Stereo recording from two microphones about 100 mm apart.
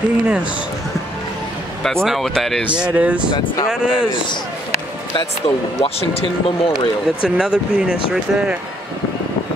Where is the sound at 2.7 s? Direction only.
10° right (ahead or behind).